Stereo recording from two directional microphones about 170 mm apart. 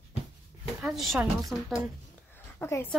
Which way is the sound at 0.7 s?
Centre (ahead or behind).